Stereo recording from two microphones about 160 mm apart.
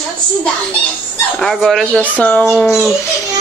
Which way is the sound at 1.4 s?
Centre (ahead or behind).